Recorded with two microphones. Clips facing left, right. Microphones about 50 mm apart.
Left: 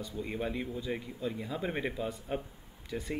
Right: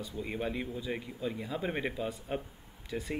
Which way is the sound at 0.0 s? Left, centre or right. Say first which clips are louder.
Even; centre.